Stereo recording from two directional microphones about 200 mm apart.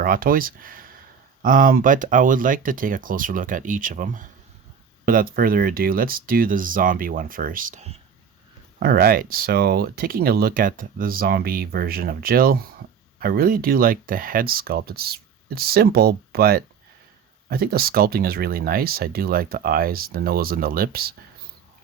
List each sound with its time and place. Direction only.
0.0 s speech: 45° right (ahead or behind)
8.8 s speech: 50° right (ahead or behind)